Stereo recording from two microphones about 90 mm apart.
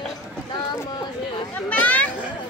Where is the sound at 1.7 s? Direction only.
15° left (ahead or behind).